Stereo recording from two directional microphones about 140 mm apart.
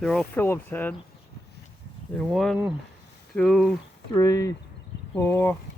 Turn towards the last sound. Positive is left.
turn(degrees=15)  # may be behind; listen again after turning